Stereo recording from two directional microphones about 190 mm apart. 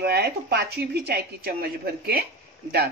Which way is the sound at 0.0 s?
55° right (ahead or behind).